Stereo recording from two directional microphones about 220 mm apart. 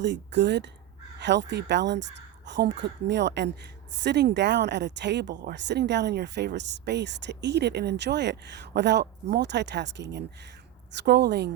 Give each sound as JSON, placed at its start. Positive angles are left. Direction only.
{"t": 0.0, "sound": "speech", "side_deg": -50}